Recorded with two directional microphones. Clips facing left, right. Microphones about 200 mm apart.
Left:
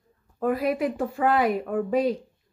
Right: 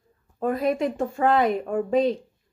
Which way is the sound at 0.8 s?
25° right (ahead or behind).